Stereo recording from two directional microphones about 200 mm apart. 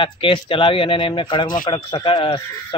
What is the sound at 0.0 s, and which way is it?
Speech, 25° left (ahead or behind).